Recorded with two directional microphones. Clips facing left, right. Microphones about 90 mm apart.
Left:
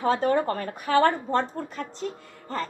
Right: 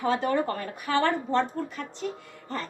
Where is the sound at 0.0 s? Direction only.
40° left (ahead or behind).